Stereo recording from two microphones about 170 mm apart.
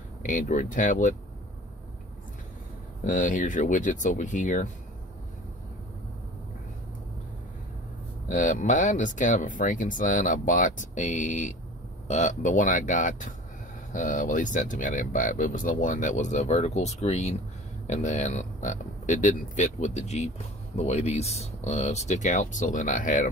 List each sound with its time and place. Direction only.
0.2 s speech: 50° left (ahead or behind)
3.1 s speech: 50° left (ahead or behind)
8.3 s speech: 50° left (ahead or behind)